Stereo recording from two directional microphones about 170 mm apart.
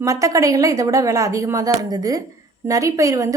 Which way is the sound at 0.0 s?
20° right (ahead or behind).